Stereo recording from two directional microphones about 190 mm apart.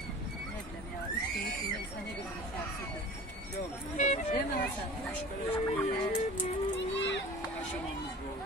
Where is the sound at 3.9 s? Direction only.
40° left (ahead or behind).